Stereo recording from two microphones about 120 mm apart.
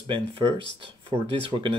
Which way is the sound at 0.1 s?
50° right (ahead or behind).